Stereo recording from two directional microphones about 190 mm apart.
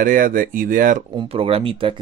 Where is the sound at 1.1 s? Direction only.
30° right (ahead or behind).